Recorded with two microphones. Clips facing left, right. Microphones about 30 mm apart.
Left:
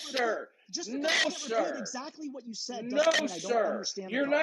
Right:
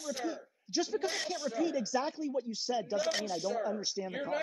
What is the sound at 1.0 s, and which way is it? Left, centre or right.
Speech, left.